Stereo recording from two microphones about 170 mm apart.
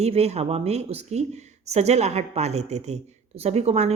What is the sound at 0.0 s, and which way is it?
Speech, 40° right (ahead or behind).